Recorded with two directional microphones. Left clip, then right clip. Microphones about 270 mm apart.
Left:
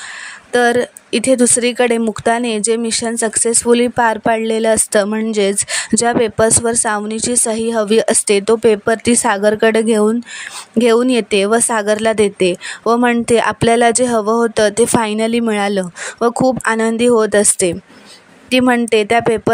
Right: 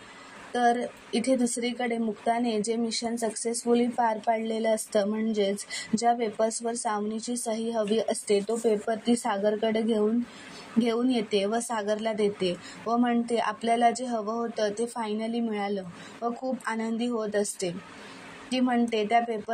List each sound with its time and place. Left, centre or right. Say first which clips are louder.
0.5 s speech: left 12 dB; left